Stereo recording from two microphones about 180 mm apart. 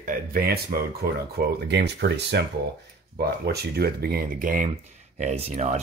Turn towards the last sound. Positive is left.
turn(degrees=-40)  # may be behind; listen again after turning